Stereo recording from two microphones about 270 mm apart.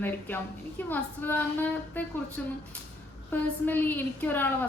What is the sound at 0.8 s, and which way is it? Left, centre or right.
A woman's voice, centre.